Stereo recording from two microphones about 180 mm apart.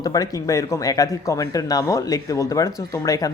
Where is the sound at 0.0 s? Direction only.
20° left (ahead or behind).